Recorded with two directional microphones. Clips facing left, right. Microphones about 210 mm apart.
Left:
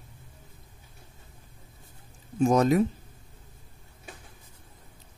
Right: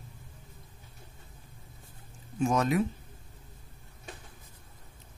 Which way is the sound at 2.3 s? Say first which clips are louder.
Left 5 dB; 40° left (ahead or behind).